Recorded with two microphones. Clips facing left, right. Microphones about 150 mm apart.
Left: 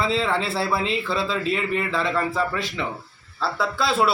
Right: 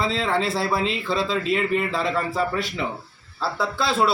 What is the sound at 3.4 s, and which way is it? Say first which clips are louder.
Speech: left 1 dB; centre (ahead or behind).